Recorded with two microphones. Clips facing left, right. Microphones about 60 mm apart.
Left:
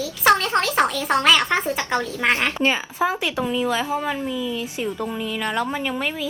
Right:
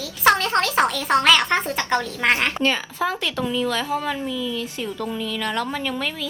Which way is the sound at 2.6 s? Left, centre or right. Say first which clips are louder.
Left 1 dB; centre.